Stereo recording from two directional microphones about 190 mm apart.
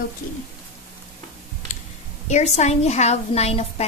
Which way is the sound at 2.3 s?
35° left (ahead or behind).